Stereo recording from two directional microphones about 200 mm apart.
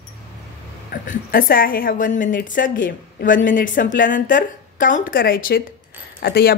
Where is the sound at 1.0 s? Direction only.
45° left (ahead or behind).